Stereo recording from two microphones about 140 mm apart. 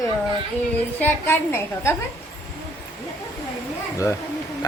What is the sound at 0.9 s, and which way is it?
Speech, 15° left (ahead or behind).